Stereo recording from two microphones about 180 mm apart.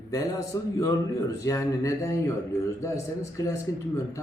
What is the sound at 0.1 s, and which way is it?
A man's voice, 20° left (ahead or behind).